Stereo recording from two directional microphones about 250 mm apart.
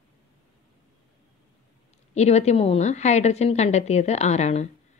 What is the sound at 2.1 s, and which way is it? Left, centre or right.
Speech, left.